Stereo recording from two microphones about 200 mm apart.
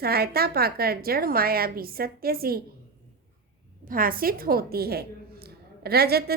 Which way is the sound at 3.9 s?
45° right (ahead or behind).